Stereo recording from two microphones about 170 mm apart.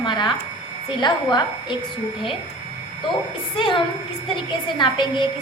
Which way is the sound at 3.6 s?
30° left (ahead or behind).